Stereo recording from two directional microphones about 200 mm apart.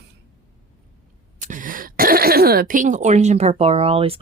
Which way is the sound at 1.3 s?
40° right (ahead or behind).